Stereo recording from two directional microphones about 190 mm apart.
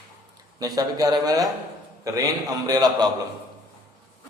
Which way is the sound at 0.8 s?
20° right (ahead or behind).